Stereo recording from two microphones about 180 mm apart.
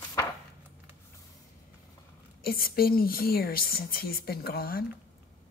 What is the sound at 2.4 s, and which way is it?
A woman's voice, 55° left (ahead or behind).